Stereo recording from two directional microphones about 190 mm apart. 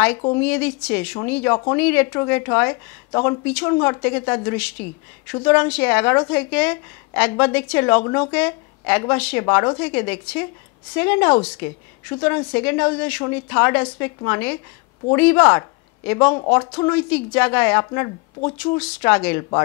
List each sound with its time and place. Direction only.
0.4 s a woman's voice: 10° left (ahead or behind)
18.6 s a woman's voice: 5° left (ahead or behind)